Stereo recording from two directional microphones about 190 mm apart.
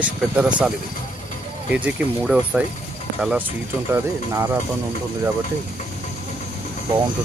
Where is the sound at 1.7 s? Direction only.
5° right (ahead or behind).